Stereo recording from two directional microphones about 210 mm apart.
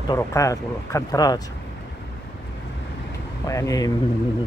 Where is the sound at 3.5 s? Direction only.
15° left (ahead or behind).